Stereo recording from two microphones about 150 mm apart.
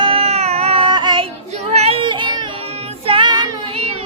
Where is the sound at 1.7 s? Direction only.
40° right (ahead or behind).